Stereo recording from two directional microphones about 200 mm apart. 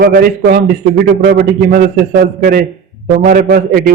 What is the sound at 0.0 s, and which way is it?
A man's voice, 50° right (ahead or behind).